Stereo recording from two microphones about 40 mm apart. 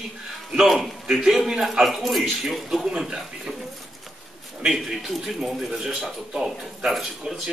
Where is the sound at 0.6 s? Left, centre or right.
Centre.